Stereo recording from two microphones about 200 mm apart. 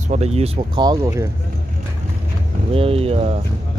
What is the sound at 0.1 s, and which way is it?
Speech, 30° right (ahead or behind).